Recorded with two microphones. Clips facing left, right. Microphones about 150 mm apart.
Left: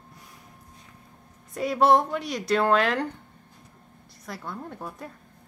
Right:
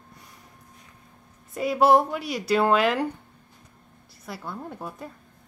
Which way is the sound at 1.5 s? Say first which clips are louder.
Right 1 dB; centre (ahead or behind).